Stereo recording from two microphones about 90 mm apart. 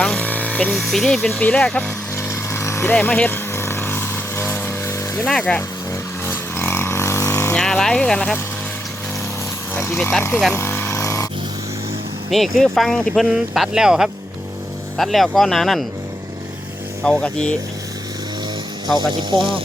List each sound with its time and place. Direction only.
0.0 s speech: 10° left (ahead or behind)
1.4 s speech: 10° left (ahead or behind)
2.1 s vehicle: 30° left (ahead or behind)
2.9 s vehicle: 15° left (ahead or behind)
5.4 s speech: 15° left (ahead or behind)
6.2 s vehicle: 25° left (ahead or behind)
7.5 s speech: 5° left (ahead or behind)
9.7 s speech: 30° left (ahead or behind)
10.5 s vehicle: 25° left (ahead or behind)
12.3 s speech: centre (ahead or behind)
17.0 s speech: 10° left (ahead or behind)
19.3 s speech: 55° right (ahead or behind)